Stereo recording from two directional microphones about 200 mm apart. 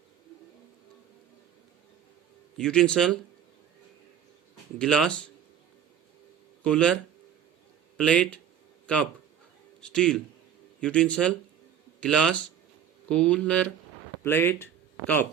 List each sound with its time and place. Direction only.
2.6 s a man's voice: 5° left (ahead or behind)
4.8 s a man's voice: 5° left (ahead or behind)
6.6 s speech: 5° left (ahead or behind)
7.9 s a man's voice: 5° left (ahead or behind)
9.8 s a man's voice: 5° left (ahead or behind)